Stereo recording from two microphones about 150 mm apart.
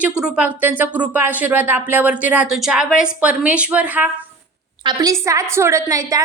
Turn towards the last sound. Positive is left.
turn(degrees=-20)  # may be behind; listen again after turning